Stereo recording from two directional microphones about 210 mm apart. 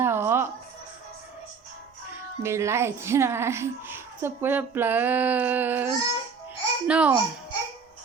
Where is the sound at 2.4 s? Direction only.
15° right (ahead or behind).